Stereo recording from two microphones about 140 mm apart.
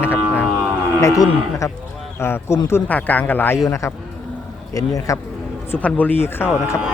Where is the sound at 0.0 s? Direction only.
15° left (ahead or behind).